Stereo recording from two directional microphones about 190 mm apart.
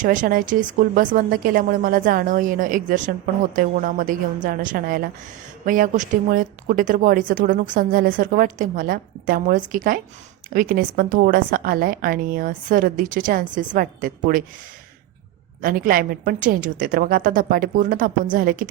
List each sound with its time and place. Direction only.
0.0 s speech: 45° right (ahead or behind)
15.6 s speech: 45° right (ahead or behind)